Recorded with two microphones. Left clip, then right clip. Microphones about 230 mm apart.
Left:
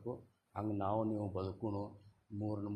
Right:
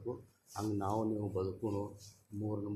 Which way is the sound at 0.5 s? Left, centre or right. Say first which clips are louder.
Right 1 dB; left.